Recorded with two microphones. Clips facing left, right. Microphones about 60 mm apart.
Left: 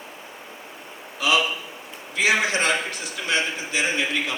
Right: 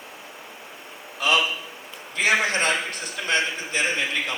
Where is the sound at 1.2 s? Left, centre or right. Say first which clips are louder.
Even; right.